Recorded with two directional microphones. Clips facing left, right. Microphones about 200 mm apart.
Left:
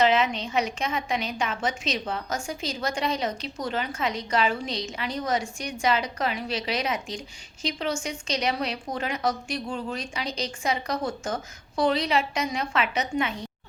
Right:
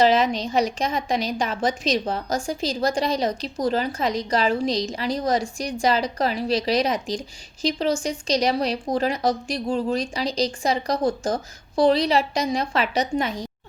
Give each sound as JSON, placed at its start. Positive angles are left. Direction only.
{"t": 0.0, "sound": "a woman's voice", "side_deg": -35}